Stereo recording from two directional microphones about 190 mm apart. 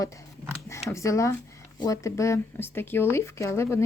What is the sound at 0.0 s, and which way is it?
A woman's voice, 15° left (ahead or behind).